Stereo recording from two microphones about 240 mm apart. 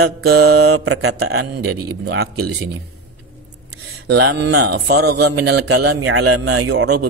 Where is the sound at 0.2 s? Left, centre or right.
Right.